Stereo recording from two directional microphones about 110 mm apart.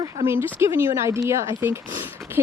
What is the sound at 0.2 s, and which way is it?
Speech, 90° right.